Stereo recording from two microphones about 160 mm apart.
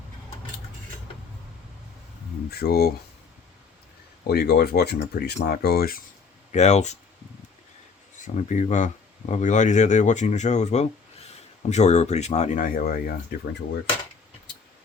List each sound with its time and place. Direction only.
2.5 s speech: 75° left (ahead or behind)
4.2 s speech: 85° left
6.5 s speech: 45° left (ahead or behind)
8.2 s speech: 50° left (ahead or behind); by 13.6 s 65° left (ahead or behind)